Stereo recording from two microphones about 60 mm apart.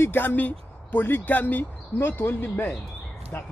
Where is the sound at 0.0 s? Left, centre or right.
Left.